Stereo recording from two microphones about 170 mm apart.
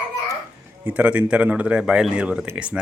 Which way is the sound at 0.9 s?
10° right (ahead or behind).